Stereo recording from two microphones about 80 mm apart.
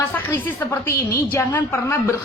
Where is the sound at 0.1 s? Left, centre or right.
Left.